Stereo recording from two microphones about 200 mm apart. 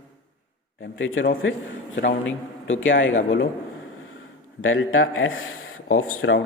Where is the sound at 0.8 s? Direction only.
75° left (ahead or behind).